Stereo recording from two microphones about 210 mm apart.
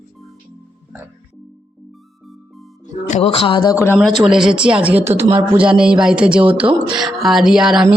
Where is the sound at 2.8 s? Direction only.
30° left (ahead or behind); by 3.9 s 15° left (ahead or behind).